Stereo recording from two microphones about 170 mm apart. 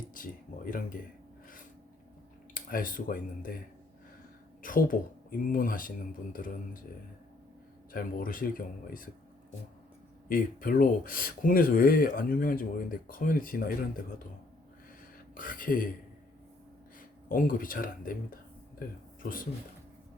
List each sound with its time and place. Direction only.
0.1 s speech: 55° left (ahead or behind)
2.6 s speech: 55° left (ahead or behind)
4.6 s speech: 55° left (ahead or behind)
7.9 s speech: 55° left (ahead or behind)
10.2 s speech: 55° left (ahead or behind)
15.4 s speech: 55° left (ahead or behind)
17.2 s speech: 55° left (ahead or behind)